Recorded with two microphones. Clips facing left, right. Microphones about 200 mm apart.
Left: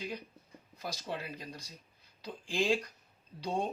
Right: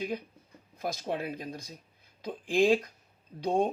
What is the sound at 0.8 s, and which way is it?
Speech, 50° right (ahead or behind).